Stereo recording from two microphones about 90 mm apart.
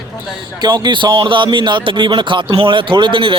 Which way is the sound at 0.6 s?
50° right (ahead or behind).